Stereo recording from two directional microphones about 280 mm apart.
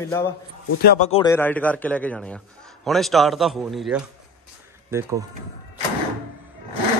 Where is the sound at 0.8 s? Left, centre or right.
Left.